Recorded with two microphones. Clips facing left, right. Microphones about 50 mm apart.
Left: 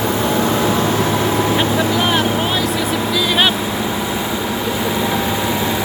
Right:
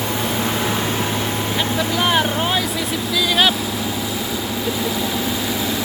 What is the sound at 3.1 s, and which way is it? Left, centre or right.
Speech, centre.